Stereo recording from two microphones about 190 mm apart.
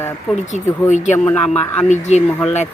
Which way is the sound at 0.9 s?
40° left (ahead or behind).